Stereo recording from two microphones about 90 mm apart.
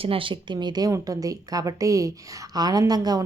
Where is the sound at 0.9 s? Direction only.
40° right (ahead or behind).